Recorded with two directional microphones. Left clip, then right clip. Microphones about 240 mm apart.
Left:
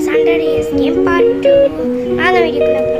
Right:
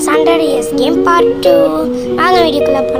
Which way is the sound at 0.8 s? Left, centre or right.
Centre.